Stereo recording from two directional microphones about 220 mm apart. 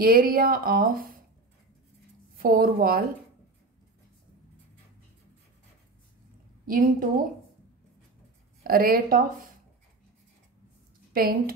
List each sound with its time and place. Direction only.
0.0 s speech: 40° right (ahead or behind)
2.3 s speech: 40° right (ahead or behind)
6.6 s a woman's voice: 40° right (ahead or behind)
8.6 s speech: 40° right (ahead or behind)
11.1 s speech: 40° right (ahead or behind)